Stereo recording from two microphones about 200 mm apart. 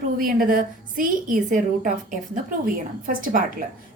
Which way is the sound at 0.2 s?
45° right (ahead or behind).